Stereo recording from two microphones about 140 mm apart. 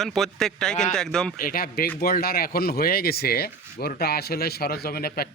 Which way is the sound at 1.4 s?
90° left.